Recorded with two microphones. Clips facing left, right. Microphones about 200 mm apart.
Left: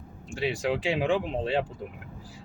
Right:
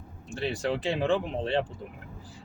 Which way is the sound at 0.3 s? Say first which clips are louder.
Left 2 dB; 10° left (ahead or behind).